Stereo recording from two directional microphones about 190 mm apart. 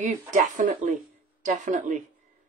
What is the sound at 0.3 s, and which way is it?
Speech, 40° right (ahead or behind).